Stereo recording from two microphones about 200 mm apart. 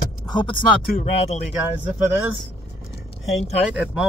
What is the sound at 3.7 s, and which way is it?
Speech, 5° right (ahead or behind).